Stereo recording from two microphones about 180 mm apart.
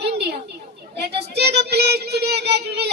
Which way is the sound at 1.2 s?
65° right (ahead or behind).